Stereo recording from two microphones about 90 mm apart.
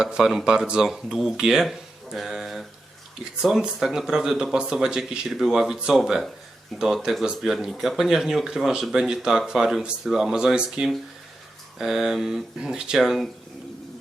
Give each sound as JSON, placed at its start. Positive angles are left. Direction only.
{"t": 0.0, "sound": "speech", "side_deg": -5}